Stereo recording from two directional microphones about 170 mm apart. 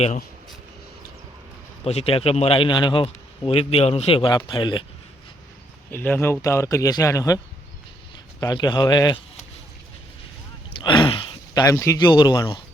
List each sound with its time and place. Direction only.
1.8 s a man's voice: 35° left (ahead or behind)
5.9 s a man's voice: 10° left (ahead or behind)
8.4 s speech: 25° left (ahead or behind)
10.8 s speech: 30° left (ahead or behind)